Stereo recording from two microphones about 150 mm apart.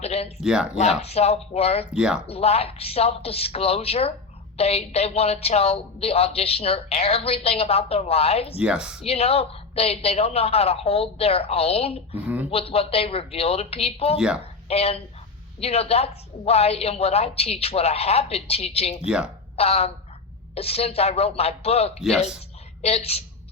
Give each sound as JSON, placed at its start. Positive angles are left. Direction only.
{"t": 0.0, "sound": "speech", "side_deg": 45}
{"t": 0.4, "sound": "speech", "side_deg": -5}
{"t": 0.8, "sound": "a woman's voice", "side_deg": 45}
{"t": 1.9, "sound": "speech", "side_deg": -5}
{"t": 2.2, "sound": "a woman's voice", "side_deg": 40}
{"t": 8.5, "sound": "speech", "side_deg": -5}
{"t": 9.0, "sound": "a woman's voice", "side_deg": 40}
{"t": 12.1, "sound": "speech", "side_deg": -10}
{"t": 12.5, "sound": "a woman's voice", "side_deg": 40}
{"t": 14.2, "sound": "speech", "side_deg": -5}
{"t": 14.7, "sound": "a woman's voice", "side_deg": 40}
{"t": 19.0, "sound": "speech", "side_deg": -5}
{"t": 19.5, "sound": "a woman's voice", "side_deg": 45}